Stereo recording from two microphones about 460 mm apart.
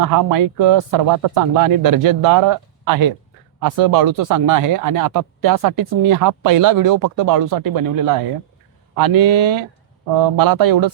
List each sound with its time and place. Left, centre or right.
0.0 s speech: right